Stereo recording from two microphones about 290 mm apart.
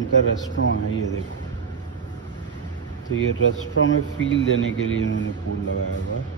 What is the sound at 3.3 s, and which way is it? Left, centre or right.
Speech, left.